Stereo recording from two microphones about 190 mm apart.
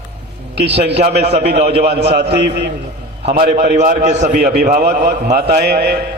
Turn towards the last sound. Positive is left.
turn(degrees=-55)  # may be behind; listen again after turning